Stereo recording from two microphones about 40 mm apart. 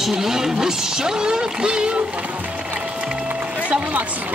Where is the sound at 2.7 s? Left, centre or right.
Right.